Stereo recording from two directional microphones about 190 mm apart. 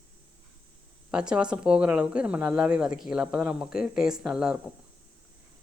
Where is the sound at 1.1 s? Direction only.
5° right (ahead or behind).